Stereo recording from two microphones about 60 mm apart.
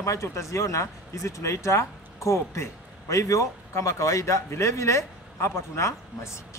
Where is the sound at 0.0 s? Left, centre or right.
Left.